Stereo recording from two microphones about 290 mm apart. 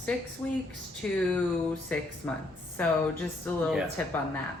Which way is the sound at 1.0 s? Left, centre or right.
Centre.